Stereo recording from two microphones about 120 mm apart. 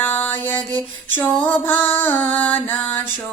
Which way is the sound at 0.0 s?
15° left (ahead or behind).